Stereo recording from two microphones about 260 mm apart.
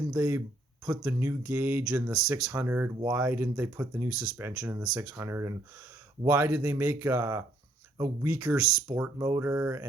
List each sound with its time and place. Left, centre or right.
0.1 s speech: centre